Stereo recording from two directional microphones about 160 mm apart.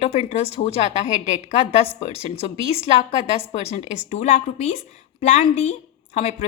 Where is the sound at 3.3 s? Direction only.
40° left (ahead or behind).